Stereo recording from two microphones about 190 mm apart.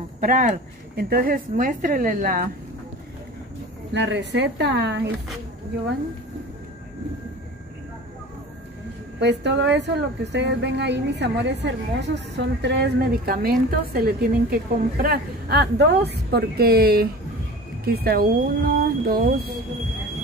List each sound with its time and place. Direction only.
0.2 s speech: 45° right (ahead or behind)
3.9 s a woman's voice: 65° right (ahead or behind)
9.2 s a woman's voice: 65° right (ahead or behind)